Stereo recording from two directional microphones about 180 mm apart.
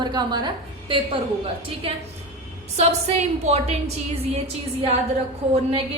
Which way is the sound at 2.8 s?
35° right (ahead or behind).